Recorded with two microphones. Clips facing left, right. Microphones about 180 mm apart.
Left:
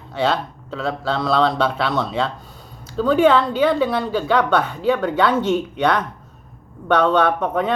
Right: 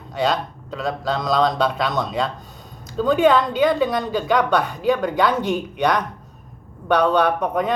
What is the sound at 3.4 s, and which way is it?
Speech, 40° right (ahead or behind).